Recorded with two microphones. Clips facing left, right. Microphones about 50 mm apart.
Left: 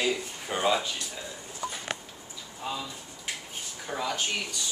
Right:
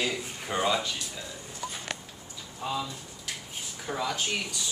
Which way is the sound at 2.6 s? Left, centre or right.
Centre.